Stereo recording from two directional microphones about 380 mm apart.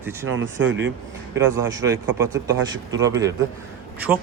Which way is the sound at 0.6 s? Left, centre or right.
Right.